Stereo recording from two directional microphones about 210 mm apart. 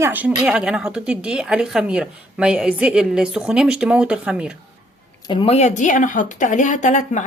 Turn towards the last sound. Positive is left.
turn(degrees=35)  # may be behind; listen again after turning